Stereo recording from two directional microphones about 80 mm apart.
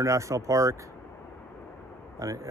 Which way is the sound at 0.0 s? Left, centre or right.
Right.